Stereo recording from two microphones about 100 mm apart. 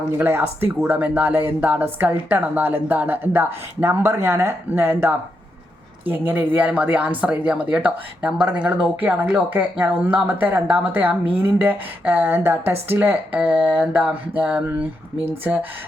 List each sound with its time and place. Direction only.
0.2 s speech: 20° right (ahead or behind)